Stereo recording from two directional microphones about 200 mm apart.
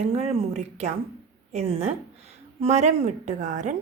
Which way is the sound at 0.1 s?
30° right (ahead or behind).